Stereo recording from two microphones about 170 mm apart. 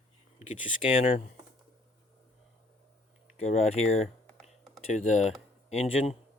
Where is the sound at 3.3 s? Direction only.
40° left (ahead or behind).